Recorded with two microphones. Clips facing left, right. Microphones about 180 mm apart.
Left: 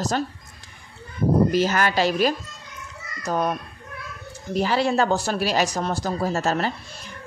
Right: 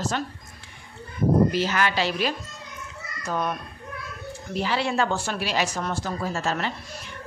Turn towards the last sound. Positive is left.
turn(degrees=40)  # may be behind; listen again after turning